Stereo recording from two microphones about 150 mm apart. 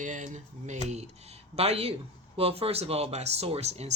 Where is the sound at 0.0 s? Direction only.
55° right (ahead or behind).